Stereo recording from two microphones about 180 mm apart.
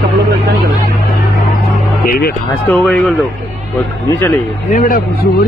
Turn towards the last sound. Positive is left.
turn(degrees=45)  # may be behind; listen again after turning